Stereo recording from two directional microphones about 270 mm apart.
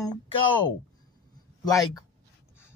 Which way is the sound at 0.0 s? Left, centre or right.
Centre.